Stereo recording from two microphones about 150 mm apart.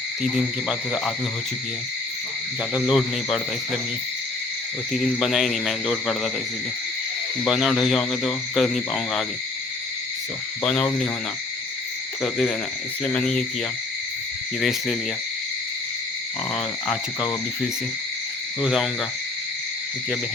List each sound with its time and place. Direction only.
0.2 s speech: 5° right (ahead or behind)
2.7 s speech: 5° right (ahead or behind)
4.9 s speech: centre (ahead or behind)
7.4 s speech: centre (ahead or behind)
10.6 s speech: 5° left (ahead or behind)
12.2 s speech: 5° left (ahead or behind)
14.6 s speech: centre (ahead or behind)
16.8 s speech: centre (ahead or behind)
18.6 s speech: centre (ahead or behind)